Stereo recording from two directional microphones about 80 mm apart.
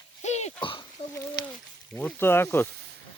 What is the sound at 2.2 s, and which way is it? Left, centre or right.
Speech, left.